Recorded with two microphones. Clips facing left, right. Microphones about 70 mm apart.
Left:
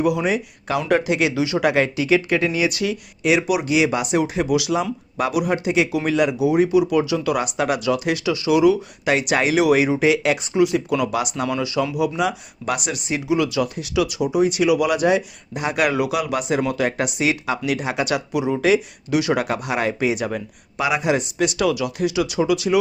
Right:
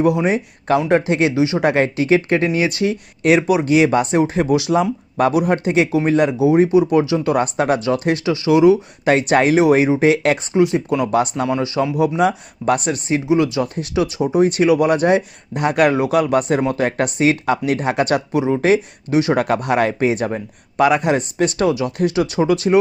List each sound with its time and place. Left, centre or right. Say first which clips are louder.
0.0 s speech: right 3 dB; right
9.0 s speech: right 5 dB; right